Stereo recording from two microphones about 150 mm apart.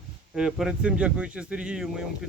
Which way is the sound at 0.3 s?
5° right (ahead or behind).